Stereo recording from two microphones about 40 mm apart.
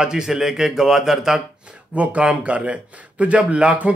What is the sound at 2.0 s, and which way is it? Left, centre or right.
A man's voice, right.